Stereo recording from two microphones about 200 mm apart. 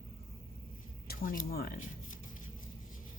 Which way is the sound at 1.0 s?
45° left (ahead or behind).